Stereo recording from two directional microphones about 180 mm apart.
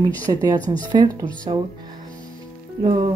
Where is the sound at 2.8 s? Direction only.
25° right (ahead or behind).